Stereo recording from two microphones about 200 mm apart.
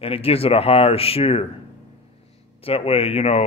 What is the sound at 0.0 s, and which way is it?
Speech, 30° left (ahead or behind).